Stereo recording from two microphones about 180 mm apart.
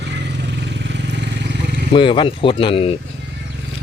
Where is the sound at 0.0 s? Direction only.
75° right (ahead or behind).